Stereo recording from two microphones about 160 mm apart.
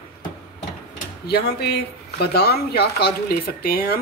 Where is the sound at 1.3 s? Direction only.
80° left.